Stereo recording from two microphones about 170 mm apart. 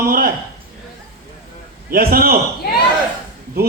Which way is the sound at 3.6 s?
65° right (ahead or behind).